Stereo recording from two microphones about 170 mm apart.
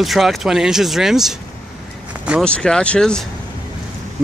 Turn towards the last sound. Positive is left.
turn(degrees=5)  # may be behind; listen again after turning